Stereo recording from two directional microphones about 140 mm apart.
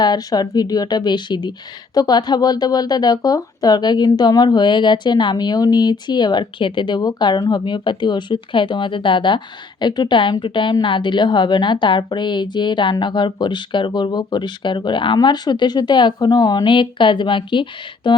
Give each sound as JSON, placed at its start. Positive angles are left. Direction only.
{"t": 0.0, "sound": "a woman's voice", "side_deg": 30}